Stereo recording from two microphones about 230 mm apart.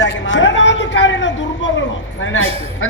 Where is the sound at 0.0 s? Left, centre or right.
Left.